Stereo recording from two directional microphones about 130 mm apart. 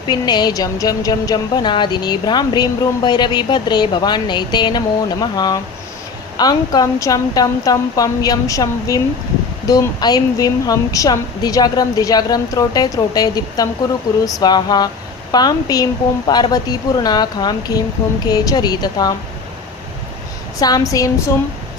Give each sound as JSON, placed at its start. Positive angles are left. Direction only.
{"t": 0.0, "sound": "a woman's voice", "side_deg": 35}
{"t": 20.6, "sound": "a woman's voice", "side_deg": 30}